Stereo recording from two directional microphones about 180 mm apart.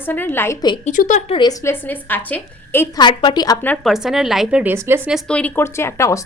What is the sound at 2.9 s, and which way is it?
Speech, 25° left (ahead or behind).